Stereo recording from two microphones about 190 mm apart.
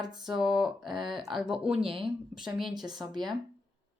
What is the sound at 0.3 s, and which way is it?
Speech, 5° right (ahead or behind).